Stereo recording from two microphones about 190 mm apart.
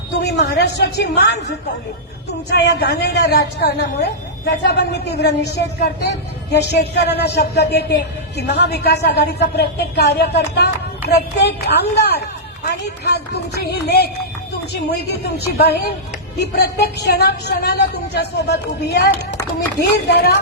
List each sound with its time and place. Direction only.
0.2 s a woman's voice: 60° left (ahead or behind)
2.5 s a woman's voice: 60° left (ahead or behind)
11.9 s a woman's voice: 60° left (ahead or behind)